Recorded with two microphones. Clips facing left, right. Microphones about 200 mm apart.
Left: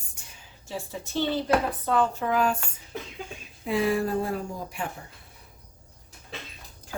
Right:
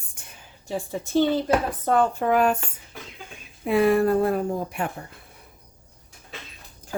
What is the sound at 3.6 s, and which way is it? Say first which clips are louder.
Speech: right 6 dB; 55° right (ahead or behind).